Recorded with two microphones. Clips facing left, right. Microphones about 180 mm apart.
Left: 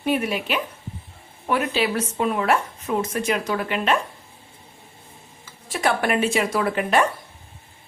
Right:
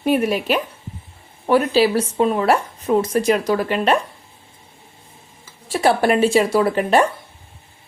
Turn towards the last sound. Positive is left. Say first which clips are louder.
# right 5 dB
turn(degrees=-35)  # may be behind; listen again after turning